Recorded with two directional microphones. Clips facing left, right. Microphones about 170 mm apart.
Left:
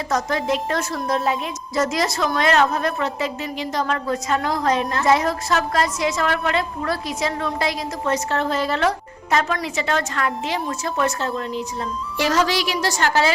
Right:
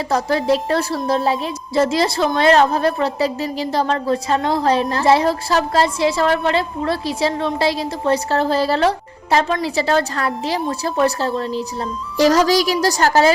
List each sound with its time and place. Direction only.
0.1 s a woman's voice: 35° right (ahead or behind)